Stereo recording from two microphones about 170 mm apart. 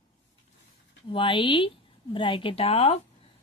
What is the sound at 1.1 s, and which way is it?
Speech, 30° left (ahead or behind).